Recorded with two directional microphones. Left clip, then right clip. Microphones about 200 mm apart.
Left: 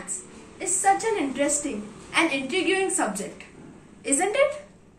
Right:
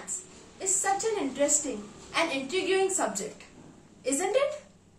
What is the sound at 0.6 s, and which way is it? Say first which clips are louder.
A woman's voice: left 6 dB; 15° right (ahead or behind).